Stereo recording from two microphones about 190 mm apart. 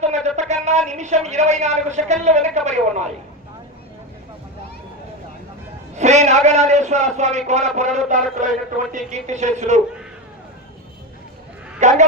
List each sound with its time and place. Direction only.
0.3 s a woman's voice: 35° right (ahead or behind)
6.0 s a man's voice: 35° right (ahead or behind)
11.8 s speech: 40° right (ahead or behind)